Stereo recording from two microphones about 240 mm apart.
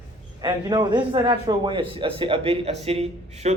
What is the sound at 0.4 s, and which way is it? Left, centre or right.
A man's voice, centre.